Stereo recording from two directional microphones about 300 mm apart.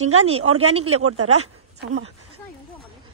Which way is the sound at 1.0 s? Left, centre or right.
Right.